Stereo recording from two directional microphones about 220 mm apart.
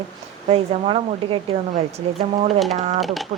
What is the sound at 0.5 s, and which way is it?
Speech, 25° right (ahead or behind).